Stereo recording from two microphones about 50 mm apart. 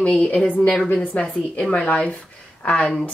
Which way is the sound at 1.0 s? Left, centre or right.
Left.